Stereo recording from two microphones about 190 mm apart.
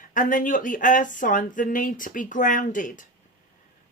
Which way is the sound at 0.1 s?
45° left (ahead or behind).